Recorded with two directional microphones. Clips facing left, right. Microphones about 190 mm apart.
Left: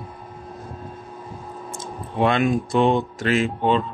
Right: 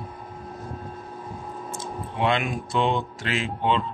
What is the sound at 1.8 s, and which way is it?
Speech, 45° left (ahead or behind).